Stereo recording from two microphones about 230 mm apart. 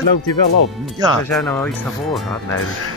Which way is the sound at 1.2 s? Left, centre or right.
Centre.